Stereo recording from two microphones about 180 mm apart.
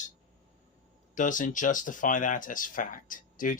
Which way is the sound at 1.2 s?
45° left (ahead or behind).